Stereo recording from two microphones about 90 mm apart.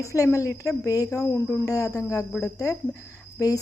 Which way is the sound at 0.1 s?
35° left (ahead or behind).